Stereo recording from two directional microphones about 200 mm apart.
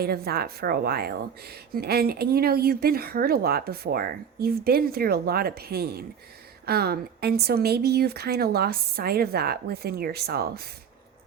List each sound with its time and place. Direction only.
0.0 s speech: 50° right (ahead or behind)